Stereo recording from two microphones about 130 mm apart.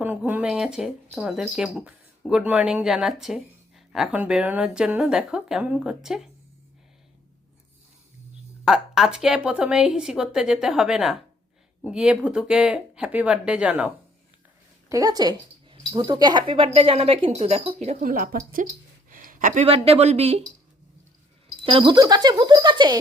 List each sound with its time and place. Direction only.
0.4 s speech: 5° right (ahead or behind)
8.6 s speech: 5° right (ahead or behind)
14.8 s speech: 25° right (ahead or behind); by 17.9 s 50° right (ahead or behind)
18.0 s speech: 90° right
19.1 s a sound: 90° right
19.6 s speech: 50° right (ahead or behind)
21.6 s speech: 45° right (ahead or behind)